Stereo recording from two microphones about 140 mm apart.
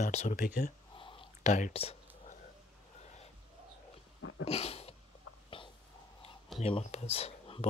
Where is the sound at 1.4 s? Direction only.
60° left (ahead or behind).